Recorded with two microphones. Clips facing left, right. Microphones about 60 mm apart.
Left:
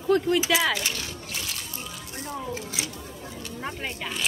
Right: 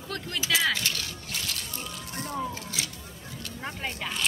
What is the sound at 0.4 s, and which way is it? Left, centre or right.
Speech, centre.